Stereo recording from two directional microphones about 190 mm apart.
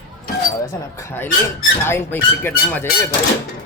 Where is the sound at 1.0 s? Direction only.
15° left (ahead or behind).